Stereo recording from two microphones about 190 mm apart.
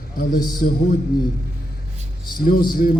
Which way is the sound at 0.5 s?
50° left (ahead or behind).